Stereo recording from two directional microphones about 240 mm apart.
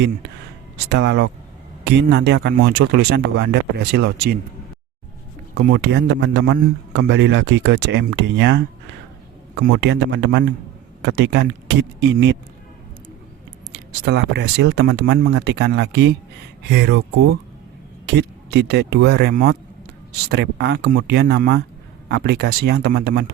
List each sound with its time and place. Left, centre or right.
0.9 s a man's voice: right
5.5 s a man's voice: right
13.7 s a man's voice: right